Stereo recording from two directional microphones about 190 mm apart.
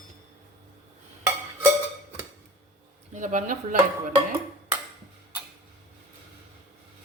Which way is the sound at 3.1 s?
40° right (ahead or behind).